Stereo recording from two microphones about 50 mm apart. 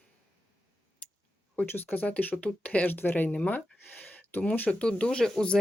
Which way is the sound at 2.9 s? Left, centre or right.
Left.